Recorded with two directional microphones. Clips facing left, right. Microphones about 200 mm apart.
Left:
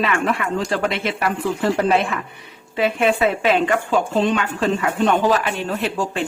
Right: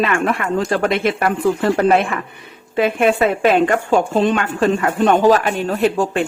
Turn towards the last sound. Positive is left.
turn(degrees=-50)  # may be behind; listen again after turning